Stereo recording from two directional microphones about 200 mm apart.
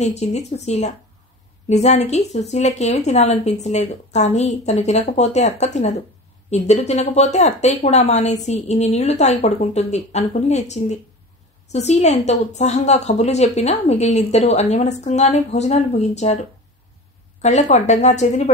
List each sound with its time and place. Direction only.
0.0 s a woman's voice: 35° left (ahead or behind)
17.4 s a woman's voice: 35° left (ahead or behind)